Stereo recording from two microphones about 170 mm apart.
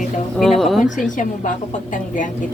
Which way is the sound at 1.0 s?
50° left (ahead or behind).